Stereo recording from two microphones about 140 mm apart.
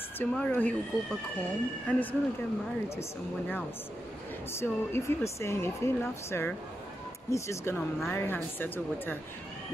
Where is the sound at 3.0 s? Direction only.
15° left (ahead or behind).